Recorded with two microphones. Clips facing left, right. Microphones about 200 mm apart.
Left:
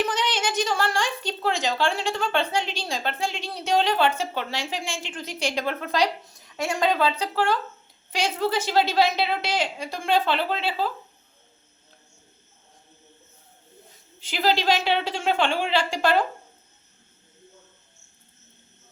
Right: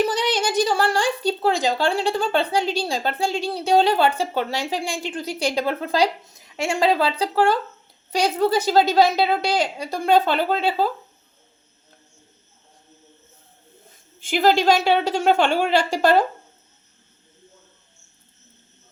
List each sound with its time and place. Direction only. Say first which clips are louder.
0.0 s speech: right 5 dB; 35° right (ahead or behind)
14.2 s a woman's voice: right 6 dB; 50° right (ahead or behind)